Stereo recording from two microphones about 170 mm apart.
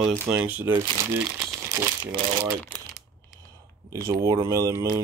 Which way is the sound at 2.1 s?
35° right (ahead or behind).